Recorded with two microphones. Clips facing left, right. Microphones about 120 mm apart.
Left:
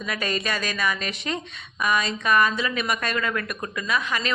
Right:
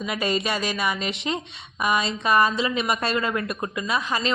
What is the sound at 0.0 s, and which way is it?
A woman's voice, 20° right (ahead or behind).